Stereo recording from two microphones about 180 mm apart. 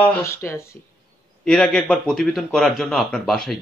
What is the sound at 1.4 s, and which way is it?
A man's voice, 5° left (ahead or behind).